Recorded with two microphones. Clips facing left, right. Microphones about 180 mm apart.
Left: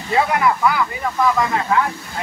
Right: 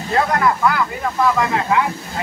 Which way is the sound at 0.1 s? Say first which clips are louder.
Even; 5° left (ahead or behind).